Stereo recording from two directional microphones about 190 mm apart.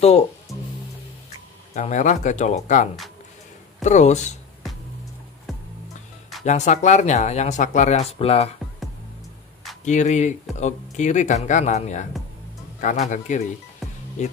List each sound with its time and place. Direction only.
1.7 s speech: 40° left (ahead or behind)
5.5 s music: centre (ahead or behind)
6.4 s speech: 40° left (ahead or behind)
9.8 s speech: 40° left (ahead or behind)